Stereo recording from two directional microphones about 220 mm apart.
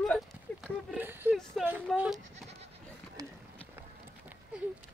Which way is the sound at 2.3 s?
30° right (ahead or behind).